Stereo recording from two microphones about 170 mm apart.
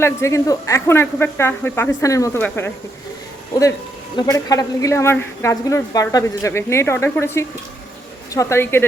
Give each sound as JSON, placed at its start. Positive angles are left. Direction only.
{"t": 0.0, "sound": "a woman's voice", "side_deg": 15}
{"t": 4.2, "sound": "a woman's voice", "side_deg": 20}